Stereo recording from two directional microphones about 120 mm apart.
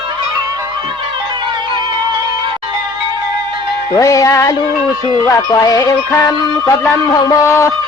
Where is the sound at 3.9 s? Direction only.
30° left (ahead or behind).